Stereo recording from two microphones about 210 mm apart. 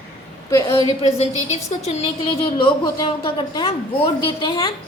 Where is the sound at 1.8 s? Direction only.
30° left (ahead or behind).